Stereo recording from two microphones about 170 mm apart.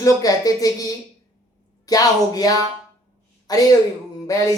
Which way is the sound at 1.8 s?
20° left (ahead or behind).